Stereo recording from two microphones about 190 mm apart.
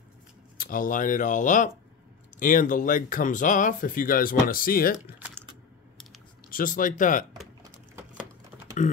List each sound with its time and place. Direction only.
0.6 s speech: 45° left (ahead or behind)
6.5 s speech: 45° left (ahead or behind)
8.8 s speech: 35° left (ahead or behind)